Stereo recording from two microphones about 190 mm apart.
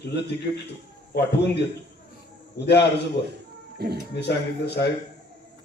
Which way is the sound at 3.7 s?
55° right (ahead or behind).